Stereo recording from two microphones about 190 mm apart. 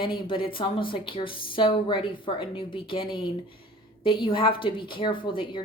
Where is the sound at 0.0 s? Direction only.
25° left (ahead or behind).